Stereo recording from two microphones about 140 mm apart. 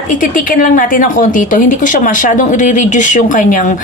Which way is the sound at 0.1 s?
70° left (ahead or behind).